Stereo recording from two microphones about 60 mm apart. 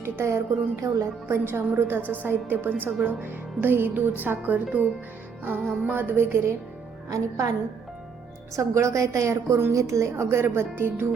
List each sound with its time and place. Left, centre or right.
0.0 s a woman's voice: right
7.1 s a woman's voice: right
8.5 s a woman's voice: right
10.2 s a woman's voice: right